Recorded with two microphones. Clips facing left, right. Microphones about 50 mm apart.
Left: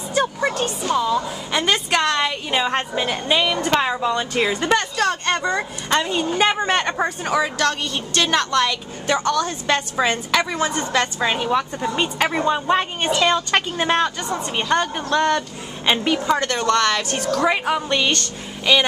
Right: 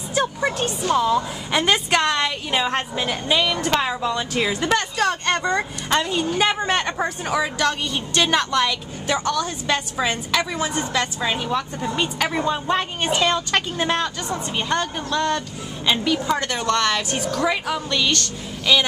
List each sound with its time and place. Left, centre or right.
0.1 s a woman's voice: centre
7.5 s a woman's voice: centre
11.1 s a woman's voice: centre
16.4 s a woman's voice: centre
17.5 s speech: left
18.2 s speech: centre